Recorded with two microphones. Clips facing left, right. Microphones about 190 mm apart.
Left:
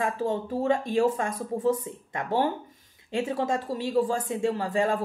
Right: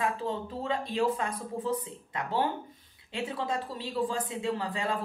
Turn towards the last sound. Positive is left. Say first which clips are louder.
# left 6 dB
turn(degrees=45)  # may be behind; listen again after turning